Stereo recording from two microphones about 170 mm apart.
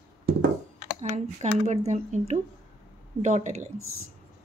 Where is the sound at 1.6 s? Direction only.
40° right (ahead or behind).